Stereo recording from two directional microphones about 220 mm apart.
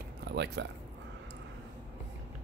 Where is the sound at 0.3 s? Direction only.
50° right (ahead or behind).